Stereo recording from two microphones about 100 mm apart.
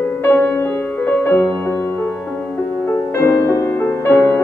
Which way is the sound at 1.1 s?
20° left (ahead or behind).